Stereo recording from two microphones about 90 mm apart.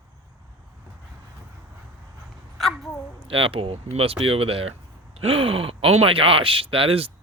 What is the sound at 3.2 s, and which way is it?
Speech, 90° right.